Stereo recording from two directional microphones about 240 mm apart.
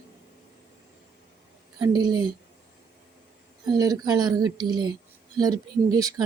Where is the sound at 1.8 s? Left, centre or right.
Centre.